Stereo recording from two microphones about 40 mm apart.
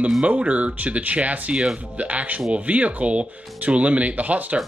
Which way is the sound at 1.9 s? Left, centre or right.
Right.